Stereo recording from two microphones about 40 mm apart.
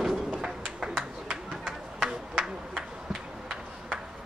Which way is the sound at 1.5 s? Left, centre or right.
Centre.